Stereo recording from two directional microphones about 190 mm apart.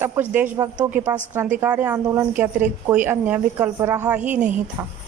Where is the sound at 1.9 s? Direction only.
20° right (ahead or behind).